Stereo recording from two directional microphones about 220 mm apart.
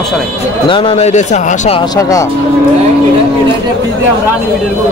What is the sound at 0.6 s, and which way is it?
Speech, 25° left (ahead or behind).